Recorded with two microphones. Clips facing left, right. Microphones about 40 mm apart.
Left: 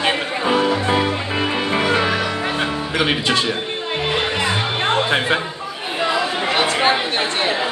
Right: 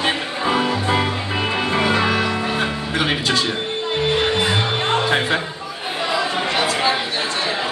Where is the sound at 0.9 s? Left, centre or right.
Centre.